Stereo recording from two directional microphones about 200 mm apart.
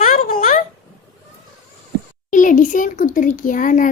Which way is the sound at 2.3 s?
40° left (ahead or behind).